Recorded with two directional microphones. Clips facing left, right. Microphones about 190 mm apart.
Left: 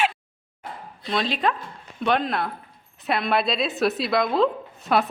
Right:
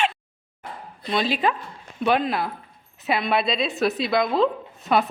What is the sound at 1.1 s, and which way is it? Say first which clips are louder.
A woman's voice: right 1 dB; 5° right (ahead or behind).